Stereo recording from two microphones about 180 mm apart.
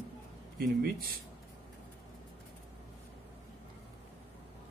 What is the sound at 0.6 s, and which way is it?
Speech, 55° right (ahead or behind).